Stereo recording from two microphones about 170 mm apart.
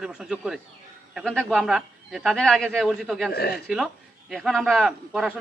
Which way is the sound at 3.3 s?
65° left (ahead or behind).